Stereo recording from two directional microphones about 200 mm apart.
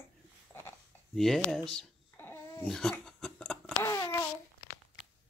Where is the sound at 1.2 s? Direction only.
Centre (ahead or behind).